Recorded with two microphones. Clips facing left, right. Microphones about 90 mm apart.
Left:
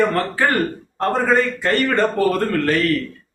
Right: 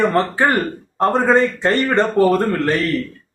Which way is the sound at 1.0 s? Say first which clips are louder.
Right 3 dB; 25° right (ahead or behind).